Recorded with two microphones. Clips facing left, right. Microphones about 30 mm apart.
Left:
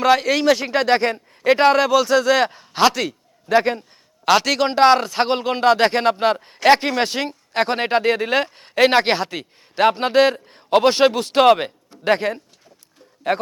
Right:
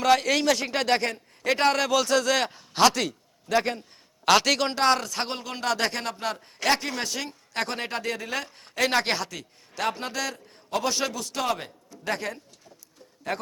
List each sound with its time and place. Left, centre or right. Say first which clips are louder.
0.0 s speech: left 5 dB; centre
3.1 s a sound: left 8 dB; left
3.6 s speech: left 7 dB; centre
4.7 s a man's voice: left 9 dB; left